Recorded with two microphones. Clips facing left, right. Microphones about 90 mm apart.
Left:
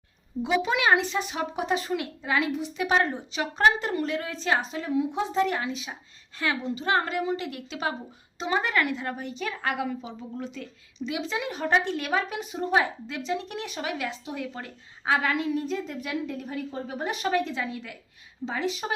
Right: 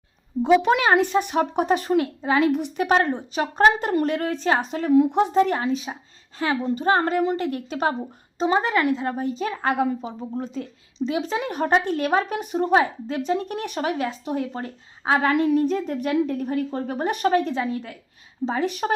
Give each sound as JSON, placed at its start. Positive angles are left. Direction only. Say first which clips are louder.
{"t": 0.4, "sound": "speech", "louder": "right 6 dB", "side_deg": -50}
{"t": 2.2, "sound": "a woman's voice", "louder": "right 5 dB", "side_deg": -35}
{"t": 2.7, "sound": "a woman's voice", "louder": "right 4 dB", "side_deg": -45}
{"t": 5.4, "sound": "a woman's voice", "louder": "right 6 dB", "side_deg": -40}
{"t": 6.6, "sound": "speech", "louder": "right 6 dB", "side_deg": -45}
{"t": 8.4, "sound": "a woman's voice", "louder": "right 5 dB", "side_deg": -30}
{"t": 12.8, "sound": "speech", "louder": "right 6 dB", "side_deg": -40}
{"t": 14.3, "sound": "a woman's voice", "louder": "right 7 dB", "side_deg": -40}
{"t": 15.4, "sound": "speech", "louder": "right 8 dB", "side_deg": -55}
{"t": 18.6, "sound": "speech", "louder": "right 5 dB", "side_deg": -50}